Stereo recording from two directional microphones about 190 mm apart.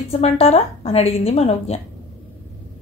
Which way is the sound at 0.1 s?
35° left (ahead or behind).